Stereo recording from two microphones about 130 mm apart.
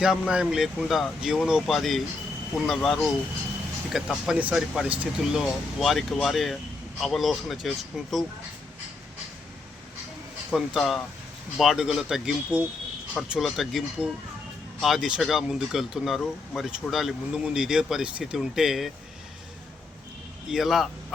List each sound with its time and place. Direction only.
0.0 s speech: 5° right (ahead or behind)
10.5 s speech: centre (ahead or behind)
20.5 s speech: centre (ahead or behind)